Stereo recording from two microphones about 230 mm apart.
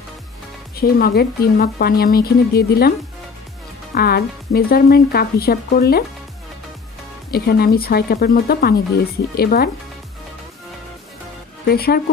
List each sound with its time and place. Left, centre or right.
0.7 s speech: left
3.9 s speech: left
7.2 s a woman's voice: left
11.6 s a woman's voice: left